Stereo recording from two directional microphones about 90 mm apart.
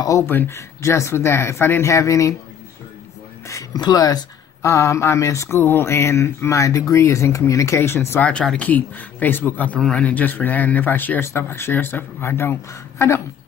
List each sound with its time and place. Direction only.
0.3 s speech: 25° left (ahead or behind)
0.6 s speech: 35° left (ahead or behind)
3.4 s speech: 35° left (ahead or behind)
8.3 s speech: 10° left (ahead or behind); by 12.5 s 25° left (ahead or behind)